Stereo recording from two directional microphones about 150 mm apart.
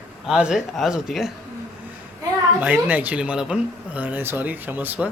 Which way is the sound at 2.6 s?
10° right (ahead or behind).